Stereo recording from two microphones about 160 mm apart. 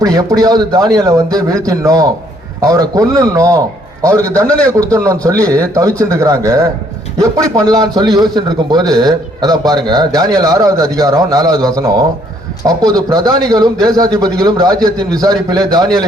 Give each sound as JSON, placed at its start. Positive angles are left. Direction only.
{"t": 0.0, "sound": "a man's voice", "side_deg": -25}
{"t": 4.6, "sound": "a man's voice", "side_deg": -20}